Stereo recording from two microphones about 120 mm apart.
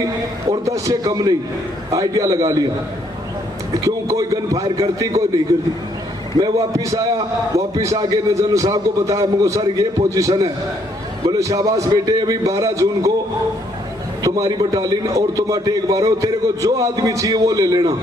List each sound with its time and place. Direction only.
0.5 s a man's voice: 30° right (ahead or behind)
3.8 s a man's voice: 25° right (ahead or behind)
6.4 s a man's voice: 25° right (ahead or behind)
14.2 s a man's voice: 30° right (ahead or behind)